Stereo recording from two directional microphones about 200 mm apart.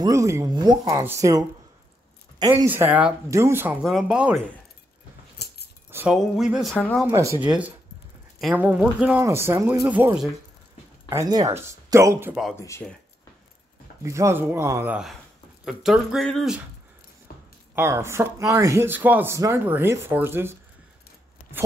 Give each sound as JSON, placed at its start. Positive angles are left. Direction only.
{"t": 0.0, "sound": "speech", "side_deg": -15}
{"t": 2.5, "sound": "speech", "side_deg": -10}
{"t": 3.8, "sound": "speech", "side_deg": 0}
{"t": 5.4, "sound": "keys jangling", "side_deg": 55}
{"t": 5.9, "sound": "cutlery", "side_deg": -10}
{"t": 6.1, "sound": "speech", "side_deg": 0}
{"t": 7.1, "sound": "speech", "side_deg": -15}
{"t": 8.4, "sound": "speech", "side_deg": -5}
{"t": 11.1, "sound": "speech", "side_deg": -15}
{"t": 12.5, "sound": "speech", "side_deg": 15}
{"t": 14.0, "sound": "speech", "side_deg": -15}
{"t": 17.7, "sound": "speech", "side_deg": -15}